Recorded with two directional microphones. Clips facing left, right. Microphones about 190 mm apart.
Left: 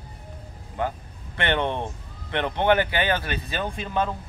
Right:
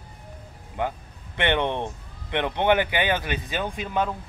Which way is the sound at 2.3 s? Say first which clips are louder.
Even; 15° right (ahead or behind).